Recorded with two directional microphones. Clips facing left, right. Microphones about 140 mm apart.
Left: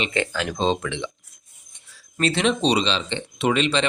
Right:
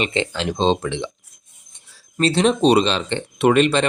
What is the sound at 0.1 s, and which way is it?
Speech, 25° right (ahead or behind).